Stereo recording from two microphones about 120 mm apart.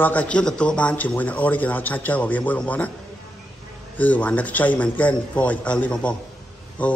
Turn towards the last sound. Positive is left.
turn(degrees=10)  # may be behind; listen again after turning